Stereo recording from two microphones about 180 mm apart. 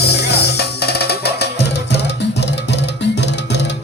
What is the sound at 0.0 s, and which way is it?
Music, 65° left (ahead or behind).